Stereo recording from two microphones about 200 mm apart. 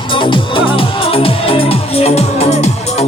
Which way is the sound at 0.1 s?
25° left (ahead or behind).